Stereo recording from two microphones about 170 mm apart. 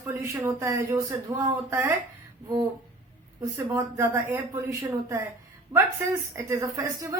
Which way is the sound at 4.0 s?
15° right (ahead or behind).